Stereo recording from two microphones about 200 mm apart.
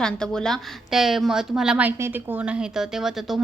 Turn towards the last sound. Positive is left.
turn(degrees=0)  # may be behind; listen again after turning